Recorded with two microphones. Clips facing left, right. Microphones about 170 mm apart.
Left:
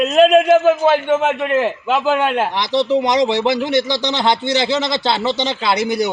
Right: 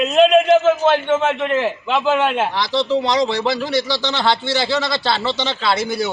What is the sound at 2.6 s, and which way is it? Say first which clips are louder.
Speech: left 3 dB; 20° left (ahead or behind).